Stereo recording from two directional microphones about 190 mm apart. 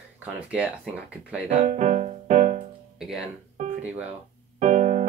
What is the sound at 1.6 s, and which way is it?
Music, 35° right (ahead or behind).